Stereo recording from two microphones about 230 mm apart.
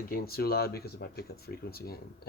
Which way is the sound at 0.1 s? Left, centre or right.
Left.